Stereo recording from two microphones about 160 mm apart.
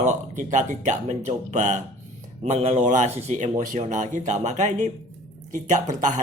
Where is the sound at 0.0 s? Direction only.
50° right (ahead or behind).